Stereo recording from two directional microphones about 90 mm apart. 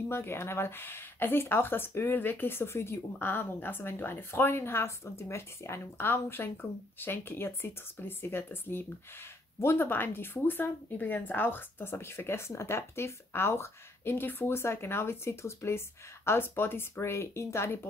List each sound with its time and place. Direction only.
0.1 s speech: 25° left (ahead or behind)